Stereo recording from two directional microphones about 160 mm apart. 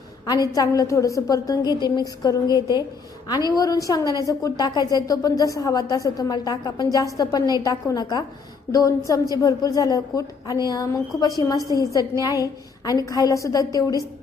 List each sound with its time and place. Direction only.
0.6 s a woman's voice: 20° left (ahead or behind)